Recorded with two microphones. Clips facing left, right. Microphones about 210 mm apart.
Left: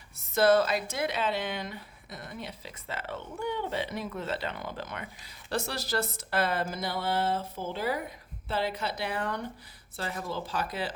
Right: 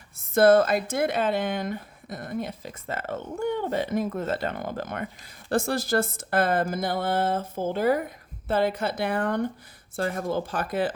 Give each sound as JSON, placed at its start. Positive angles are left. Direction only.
{"t": 0.2, "sound": "a woman's voice", "side_deg": -50}